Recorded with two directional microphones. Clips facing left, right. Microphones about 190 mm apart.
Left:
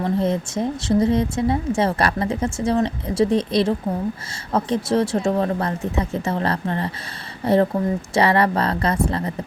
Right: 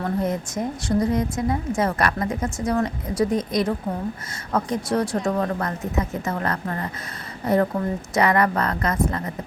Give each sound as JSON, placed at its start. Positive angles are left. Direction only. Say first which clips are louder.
{"t": 0.0, "sound": "a woman's voice", "louder": "left 3 dB", "side_deg": 25}